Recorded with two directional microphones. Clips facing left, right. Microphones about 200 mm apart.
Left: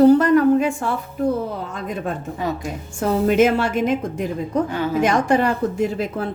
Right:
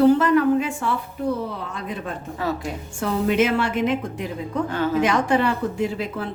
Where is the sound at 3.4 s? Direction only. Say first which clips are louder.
Left 3 dB; 45° left (ahead or behind).